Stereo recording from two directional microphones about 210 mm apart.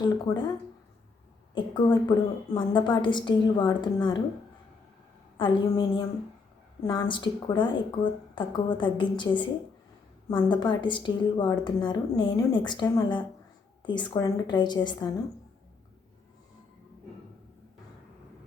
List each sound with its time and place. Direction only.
0.0 s a woman's voice: 20° left (ahead or behind)
1.5 s a woman's voice: 20° left (ahead or behind)
5.4 s a woman's voice: 20° left (ahead or behind)